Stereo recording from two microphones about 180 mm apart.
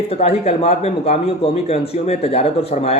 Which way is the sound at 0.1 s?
35° left (ahead or behind).